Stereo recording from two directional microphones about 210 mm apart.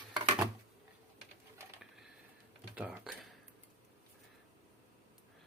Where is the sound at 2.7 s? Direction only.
5° right (ahead or behind).